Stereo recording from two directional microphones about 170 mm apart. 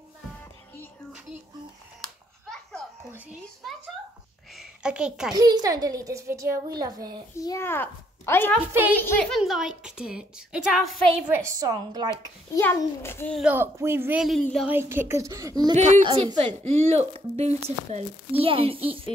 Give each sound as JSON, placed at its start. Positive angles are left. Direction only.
{"t": 4.6, "sound": "a sound", "side_deg": -5}
{"t": 5.3, "sound": "a child's voice", "side_deg": -25}
{"t": 7.3, "sound": "a child's voice", "side_deg": 15}
{"t": 8.5, "sound": "speech", "side_deg": -10}
{"t": 9.0, "sound": "a child's voice", "side_deg": 5}
{"t": 11.4, "sound": "a child's voice", "side_deg": -20}
{"t": 12.1, "sound": "a child's voice", "side_deg": 15}
{"t": 13.4, "sound": "a child's voice", "side_deg": -10}
{"t": 16.1, "sound": "a woman's voice", "side_deg": -35}